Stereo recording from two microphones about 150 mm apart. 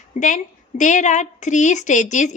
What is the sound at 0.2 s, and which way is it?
A woman's voice, 55° left (ahead or behind).